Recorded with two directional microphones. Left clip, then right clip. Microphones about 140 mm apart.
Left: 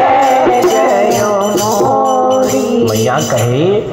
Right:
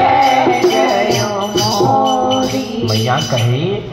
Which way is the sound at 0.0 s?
25° left (ahead or behind).